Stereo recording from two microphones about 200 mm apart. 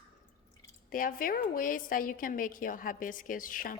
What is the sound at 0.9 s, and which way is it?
A woman's voice, 45° left (ahead or behind).